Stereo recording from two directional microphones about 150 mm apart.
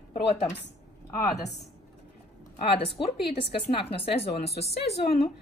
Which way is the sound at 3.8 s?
40° left (ahead or behind).